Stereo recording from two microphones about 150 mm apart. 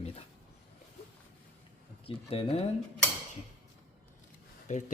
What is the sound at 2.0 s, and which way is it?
Speech, 40° left (ahead or behind).